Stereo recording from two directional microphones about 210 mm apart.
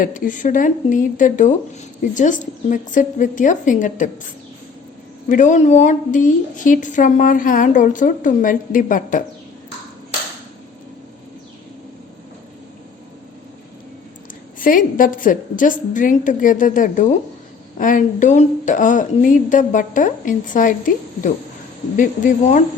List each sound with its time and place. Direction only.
0.0 s speech: 40° left (ahead or behind)
5.3 s speech: 35° left (ahead or behind)
14.6 s speech: 40° left (ahead or behind)